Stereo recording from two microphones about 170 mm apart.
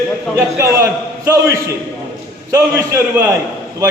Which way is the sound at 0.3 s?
15° right (ahead or behind).